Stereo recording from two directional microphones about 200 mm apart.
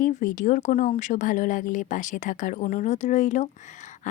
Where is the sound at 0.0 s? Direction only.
40° left (ahead or behind).